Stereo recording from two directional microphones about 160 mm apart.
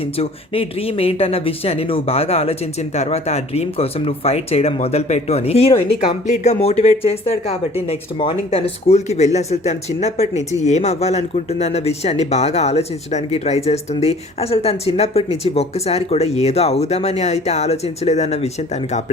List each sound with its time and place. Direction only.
0.2 s speech: 35° left (ahead or behind)